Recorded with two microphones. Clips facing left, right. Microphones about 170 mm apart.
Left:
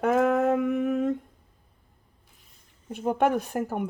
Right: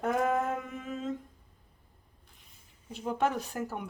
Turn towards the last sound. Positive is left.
turn(degrees=55)  # may be behind; listen again after turning